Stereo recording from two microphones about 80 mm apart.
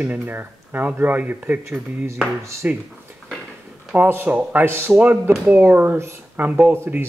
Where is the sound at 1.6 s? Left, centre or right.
Right.